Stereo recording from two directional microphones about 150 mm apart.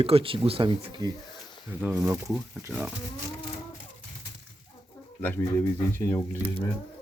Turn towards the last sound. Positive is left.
turn(degrees=15)  # may be behind; listen again after turning